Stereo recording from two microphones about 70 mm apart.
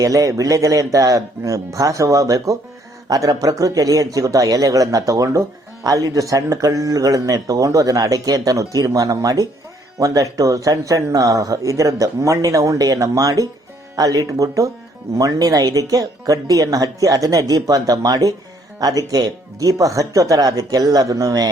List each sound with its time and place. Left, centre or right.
0.0 s speech: right